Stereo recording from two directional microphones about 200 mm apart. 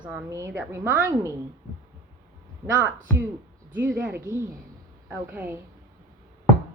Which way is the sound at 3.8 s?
5° right (ahead or behind).